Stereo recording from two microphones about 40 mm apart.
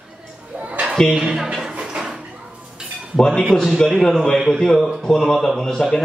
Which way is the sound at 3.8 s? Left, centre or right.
Centre.